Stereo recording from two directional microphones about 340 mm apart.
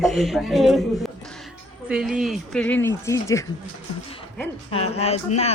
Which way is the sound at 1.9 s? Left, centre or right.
Centre.